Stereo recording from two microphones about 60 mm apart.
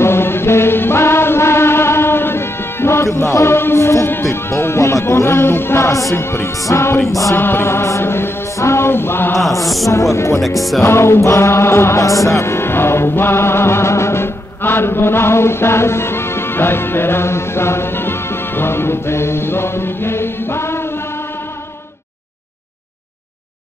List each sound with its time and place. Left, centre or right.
0.0 s music: left
6.1 s music: left
6.5 s speech: left
7.3 s mantra: left
8.5 s a sound: left
9.8 s speech: left
10.8 s music: left
12.1 s music: left